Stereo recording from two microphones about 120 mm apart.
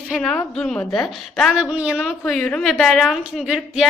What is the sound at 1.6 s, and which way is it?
Speech, 10° right (ahead or behind).